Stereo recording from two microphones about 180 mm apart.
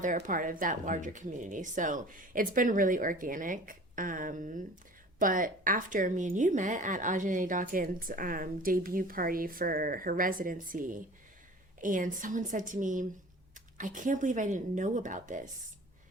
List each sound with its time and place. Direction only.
0.0 s a woman's voice: 45° right (ahead or behind)